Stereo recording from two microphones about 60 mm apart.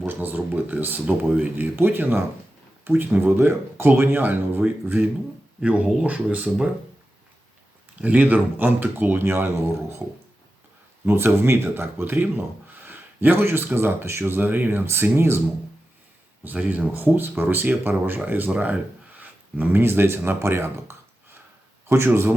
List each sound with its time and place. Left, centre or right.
0.0 s speech: right
1.0 s speech: centre
1.5 s speech: right
5.6 s speech: right
8.0 s speech: right
11.0 s speech: right
12.8 s a sound: right
13.7 s a man's voice: right
16.4 s a man's voice: right